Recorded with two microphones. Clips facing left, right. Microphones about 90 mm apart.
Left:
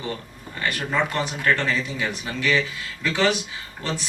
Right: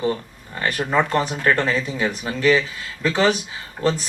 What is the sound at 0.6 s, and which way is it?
Speech, 40° right (ahead or behind).